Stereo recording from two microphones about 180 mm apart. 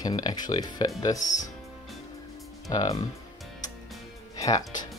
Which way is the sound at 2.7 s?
20° left (ahead or behind).